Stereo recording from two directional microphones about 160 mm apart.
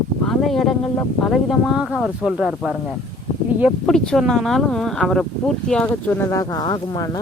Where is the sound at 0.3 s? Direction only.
Centre (ahead or behind).